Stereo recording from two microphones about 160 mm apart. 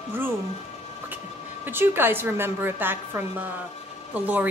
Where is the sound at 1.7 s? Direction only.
15° right (ahead or behind).